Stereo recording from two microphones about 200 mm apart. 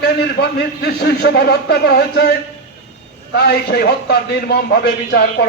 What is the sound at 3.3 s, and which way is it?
A man's voice, 55° left (ahead or behind).